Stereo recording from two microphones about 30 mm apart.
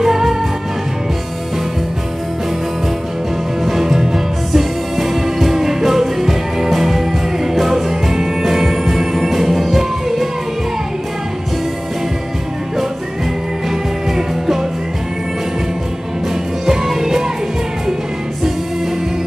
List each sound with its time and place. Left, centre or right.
0.0 s music: centre
3.8 s music: centre
13.7 s music: centre
16.6 s music: centre